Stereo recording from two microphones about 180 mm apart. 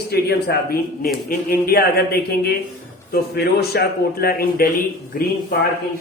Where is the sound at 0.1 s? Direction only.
60° left (ahead or behind).